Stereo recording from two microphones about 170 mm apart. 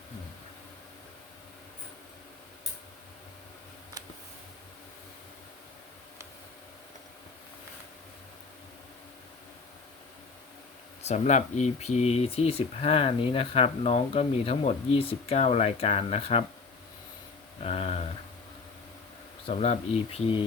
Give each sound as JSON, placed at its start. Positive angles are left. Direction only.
{"t": 11.0, "sound": "speech", "side_deg": 40}
{"t": 17.6, "sound": "speech", "side_deg": 35}
{"t": 19.5, "sound": "speech", "side_deg": 35}